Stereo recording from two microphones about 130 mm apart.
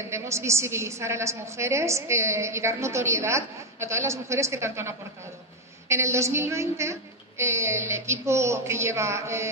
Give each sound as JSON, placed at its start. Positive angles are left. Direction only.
{"t": 0.0, "sound": "a woman's voice", "side_deg": -20}